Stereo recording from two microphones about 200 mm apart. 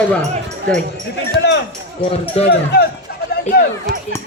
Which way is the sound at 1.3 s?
60° left (ahead or behind).